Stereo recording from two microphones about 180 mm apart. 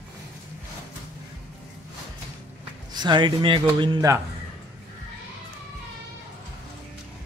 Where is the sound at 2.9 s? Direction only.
25° right (ahead or behind).